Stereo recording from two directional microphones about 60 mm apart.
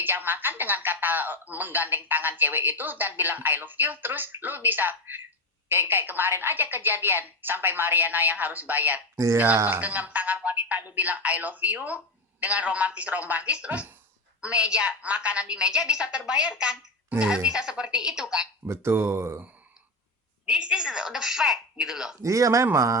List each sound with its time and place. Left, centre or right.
0.0 s a woman's voice: right
9.1 s speech: right
9.6 s a woman's voice: right; by 18.4 s centre
18.6 s speech: right
20.5 s a woman's voice: centre
22.2 s speech: right